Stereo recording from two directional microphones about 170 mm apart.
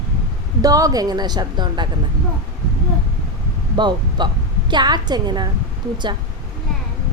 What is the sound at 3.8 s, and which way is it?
A woman's voice, 25° right (ahead or behind).